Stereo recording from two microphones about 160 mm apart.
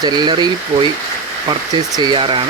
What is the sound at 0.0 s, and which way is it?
Speech, 25° right (ahead or behind).